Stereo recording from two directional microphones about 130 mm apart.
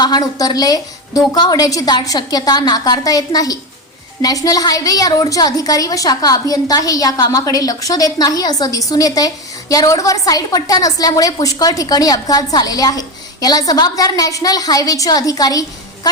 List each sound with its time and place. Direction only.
0.0 s a woman's voice: 30° left (ahead or behind)